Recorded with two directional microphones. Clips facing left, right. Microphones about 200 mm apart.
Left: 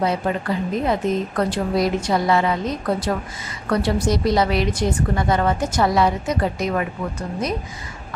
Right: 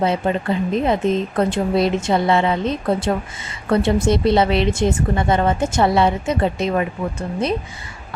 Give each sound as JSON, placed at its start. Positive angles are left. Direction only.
{"t": 0.0, "sound": "a woman's voice", "side_deg": -25}